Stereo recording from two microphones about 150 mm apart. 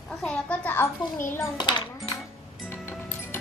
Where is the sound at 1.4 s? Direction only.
30° left (ahead or behind).